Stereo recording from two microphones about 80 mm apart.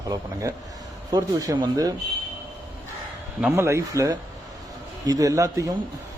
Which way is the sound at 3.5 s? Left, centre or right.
Right.